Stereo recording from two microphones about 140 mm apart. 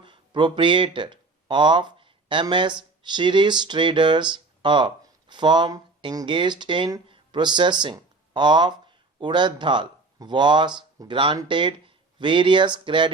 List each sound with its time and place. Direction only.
0.0 s speech: 35° right (ahead or behind)